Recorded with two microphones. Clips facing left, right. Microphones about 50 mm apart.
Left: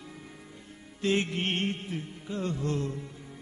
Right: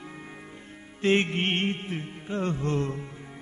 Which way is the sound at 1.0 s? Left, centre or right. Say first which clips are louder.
Right 4 dB; right.